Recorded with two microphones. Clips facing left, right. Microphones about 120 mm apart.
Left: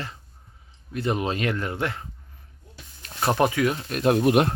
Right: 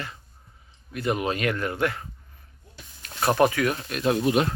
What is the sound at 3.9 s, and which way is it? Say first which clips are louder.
Speech: left 4 dB; 45° left (ahead or behind).